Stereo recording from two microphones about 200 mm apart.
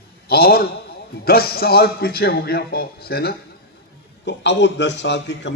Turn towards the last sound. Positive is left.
turn(degrees=60)  # may be behind; listen again after turning